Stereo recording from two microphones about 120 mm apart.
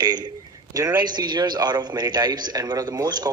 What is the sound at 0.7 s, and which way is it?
A man's voice, 30° right (ahead or behind).